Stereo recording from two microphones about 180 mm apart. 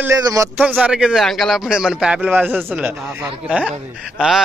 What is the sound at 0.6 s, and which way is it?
A man's voice, 10° right (ahead or behind).